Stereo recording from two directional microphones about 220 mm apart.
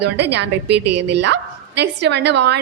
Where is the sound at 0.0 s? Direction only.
50° right (ahead or behind).